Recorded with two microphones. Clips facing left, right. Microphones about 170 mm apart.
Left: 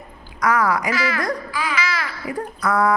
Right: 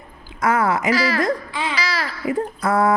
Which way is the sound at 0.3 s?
25° right (ahead or behind).